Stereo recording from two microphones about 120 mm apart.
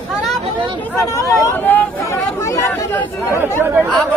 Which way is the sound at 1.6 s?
15° left (ahead or behind).